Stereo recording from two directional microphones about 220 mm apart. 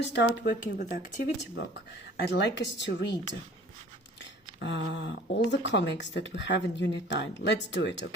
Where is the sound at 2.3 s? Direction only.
50° left (ahead or behind).